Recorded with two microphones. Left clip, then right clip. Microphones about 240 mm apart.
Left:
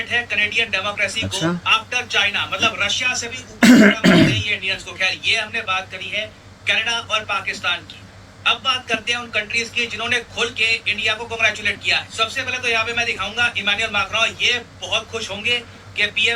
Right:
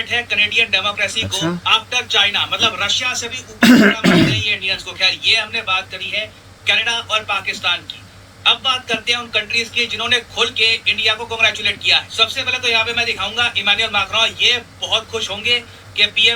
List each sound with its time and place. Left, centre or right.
0.1 s a man's voice: centre
1.2 s speech: centre
1.6 s a man's voice: centre
3.6 s cough: centre
4.4 s a man's voice: centre